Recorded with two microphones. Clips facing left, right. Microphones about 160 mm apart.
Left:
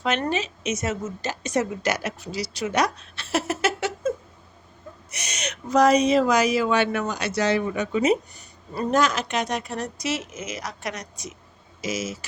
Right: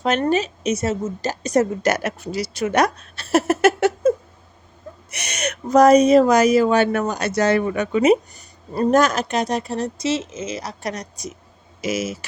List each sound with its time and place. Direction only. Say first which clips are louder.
0.0 s a woman's voice: right 6 dB; 40° right (ahead or behind)
5.1 s speech: right 7 dB; 60° right (ahead or behind)
8.4 s speech: right 7 dB; 45° right (ahead or behind)
11.8 s speech: right 5 dB; 60° right (ahead or behind)